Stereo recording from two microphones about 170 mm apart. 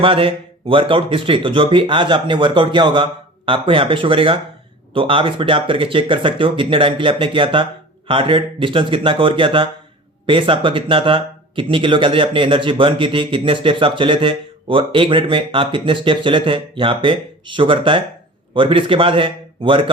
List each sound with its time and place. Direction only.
0.0 s speech: 30° right (ahead or behind)